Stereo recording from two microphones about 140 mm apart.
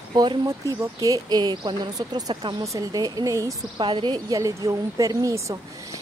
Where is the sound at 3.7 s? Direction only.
35° right (ahead or behind).